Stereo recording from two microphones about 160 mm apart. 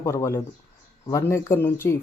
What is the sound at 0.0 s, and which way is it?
Speech, 20° left (ahead or behind).